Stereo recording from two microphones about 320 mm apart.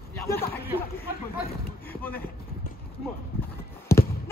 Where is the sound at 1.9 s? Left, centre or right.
Centre.